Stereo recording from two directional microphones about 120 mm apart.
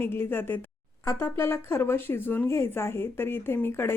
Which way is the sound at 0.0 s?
20° left (ahead or behind).